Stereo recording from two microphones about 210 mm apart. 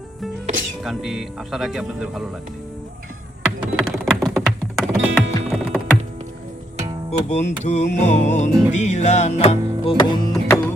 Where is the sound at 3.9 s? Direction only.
Centre (ahead or behind).